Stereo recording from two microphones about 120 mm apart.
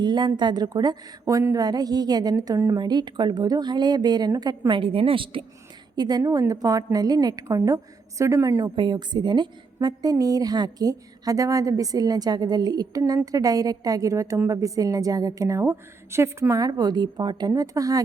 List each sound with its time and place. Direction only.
0.0 s a woman's voice: 40° right (ahead or behind)
4.8 s a woman's voice: 50° right (ahead or behind)
6.0 s a woman's voice: 35° right (ahead or behind)
8.6 s a woman's voice: 40° right (ahead or behind)